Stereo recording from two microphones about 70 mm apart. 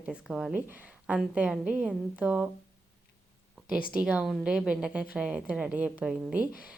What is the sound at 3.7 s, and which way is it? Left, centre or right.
A woman's voice, centre.